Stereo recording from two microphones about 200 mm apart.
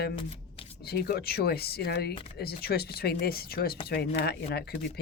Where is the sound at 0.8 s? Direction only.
50° left (ahead or behind).